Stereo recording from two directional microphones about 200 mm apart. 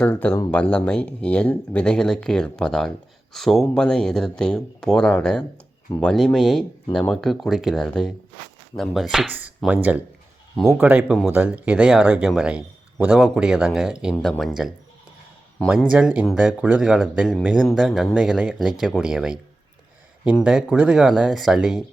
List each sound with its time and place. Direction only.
0.0 s a man's voice: 10° left (ahead or behind)
15.8 s a man's voice: 5° right (ahead or behind)
20.4 s a man's voice: 5° right (ahead or behind)